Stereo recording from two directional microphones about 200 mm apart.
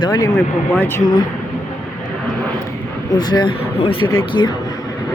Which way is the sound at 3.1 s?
20° left (ahead or behind).